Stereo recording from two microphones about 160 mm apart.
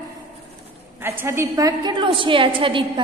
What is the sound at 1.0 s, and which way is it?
A woman's voice, 15° right (ahead or behind).